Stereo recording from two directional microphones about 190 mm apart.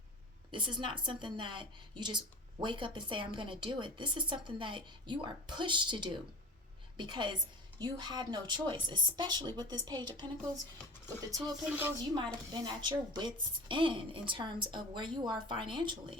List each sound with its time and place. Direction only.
0.5 s a woman's voice: 25° right (ahead or behind)
11.3 s a woman's voice: 20° right (ahead or behind)